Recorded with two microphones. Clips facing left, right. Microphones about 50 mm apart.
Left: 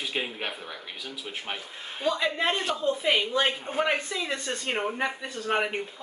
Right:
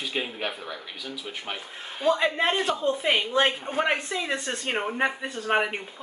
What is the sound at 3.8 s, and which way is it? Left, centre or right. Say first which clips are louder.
A woman's voice: right 1 dB; centre.